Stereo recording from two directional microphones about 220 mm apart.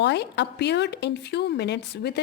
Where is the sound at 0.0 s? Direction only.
50° left (ahead or behind).